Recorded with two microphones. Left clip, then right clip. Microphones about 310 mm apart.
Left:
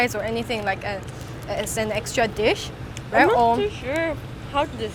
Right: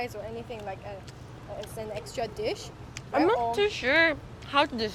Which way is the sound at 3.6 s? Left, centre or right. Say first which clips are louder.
Right 1 dB; right.